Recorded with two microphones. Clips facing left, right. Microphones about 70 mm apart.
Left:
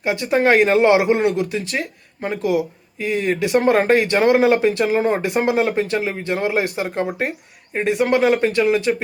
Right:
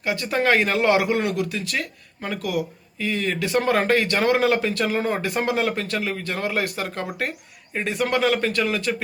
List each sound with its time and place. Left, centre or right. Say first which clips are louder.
0.0 s speech: left 5 dB; left